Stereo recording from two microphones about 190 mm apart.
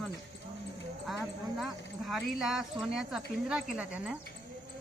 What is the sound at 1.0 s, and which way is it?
Speech, centre (ahead or behind).